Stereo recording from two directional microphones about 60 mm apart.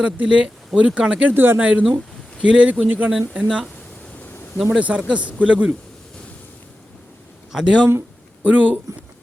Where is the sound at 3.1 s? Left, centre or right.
Centre.